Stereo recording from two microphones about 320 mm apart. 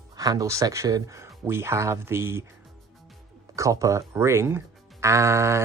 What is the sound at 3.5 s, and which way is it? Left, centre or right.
Speech, centre.